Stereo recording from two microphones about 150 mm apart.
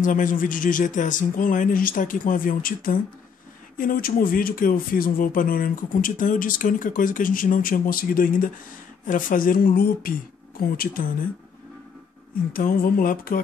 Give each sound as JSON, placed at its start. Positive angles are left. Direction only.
{"t": 0.0, "sound": "speech", "side_deg": 60}
{"t": 12.5, "sound": "speech", "side_deg": 70}